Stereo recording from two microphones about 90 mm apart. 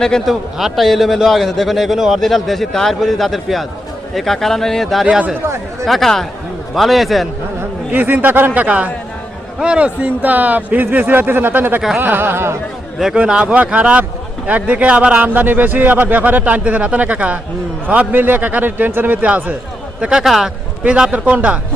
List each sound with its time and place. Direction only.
0.0 s a man's voice: 5° left (ahead or behind)
5.0 s a man's voice: 15° right (ahead or behind)
5.8 s a man's voice: 5° left (ahead or behind)
7.9 s a man's voice: 20° right (ahead or behind)
13.0 s a man's voice: 5° right (ahead or behind)